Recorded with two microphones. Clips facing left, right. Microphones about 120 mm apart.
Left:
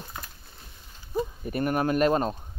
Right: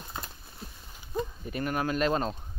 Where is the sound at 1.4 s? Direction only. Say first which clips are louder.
Left 6 dB; 45° left (ahead or behind).